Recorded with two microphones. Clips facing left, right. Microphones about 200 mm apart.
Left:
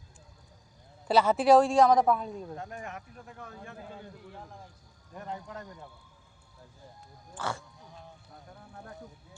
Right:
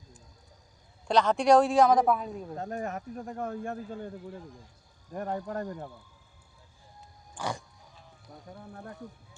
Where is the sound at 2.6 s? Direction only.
40° right (ahead or behind); by 5.9 s 60° right (ahead or behind).